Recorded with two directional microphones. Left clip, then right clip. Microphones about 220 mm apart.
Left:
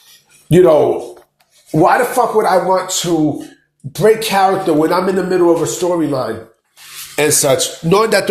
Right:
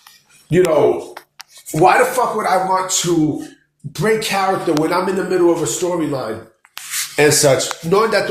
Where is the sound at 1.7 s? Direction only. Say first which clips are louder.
Left 1 dB; 25° left (ahead or behind).